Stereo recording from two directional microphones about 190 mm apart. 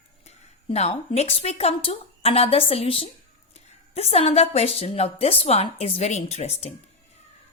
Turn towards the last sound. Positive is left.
turn(degrees=35)  # may be behind; listen again after turning